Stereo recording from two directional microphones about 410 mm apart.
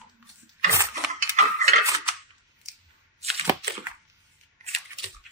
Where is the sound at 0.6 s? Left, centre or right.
Centre.